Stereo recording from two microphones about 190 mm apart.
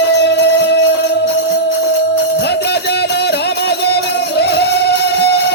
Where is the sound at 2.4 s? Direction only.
60° left (ahead or behind).